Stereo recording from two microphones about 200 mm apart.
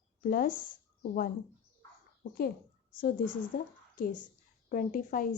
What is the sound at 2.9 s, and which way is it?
Speech, 45° left (ahead or behind).